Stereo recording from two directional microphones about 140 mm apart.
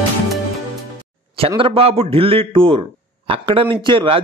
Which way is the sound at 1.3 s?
40° right (ahead or behind).